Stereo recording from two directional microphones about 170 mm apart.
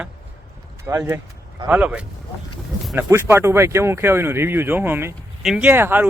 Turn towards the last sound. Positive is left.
turn(degrees=-10)  # may be behind; listen again after turning